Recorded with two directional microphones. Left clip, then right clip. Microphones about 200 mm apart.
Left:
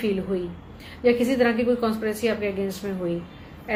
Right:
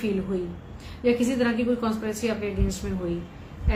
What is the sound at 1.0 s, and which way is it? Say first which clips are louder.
A woman's voice: left 4 dB; centre (ahead or behind).